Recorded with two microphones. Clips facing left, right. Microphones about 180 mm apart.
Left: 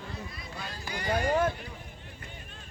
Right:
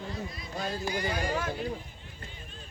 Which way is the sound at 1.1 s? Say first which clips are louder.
Left 5 dB; 55° left (ahead or behind).